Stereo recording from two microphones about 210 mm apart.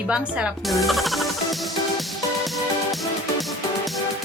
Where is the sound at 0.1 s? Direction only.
5° right (ahead or behind).